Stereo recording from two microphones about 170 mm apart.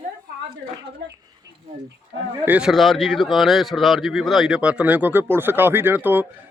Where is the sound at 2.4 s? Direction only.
5° right (ahead or behind).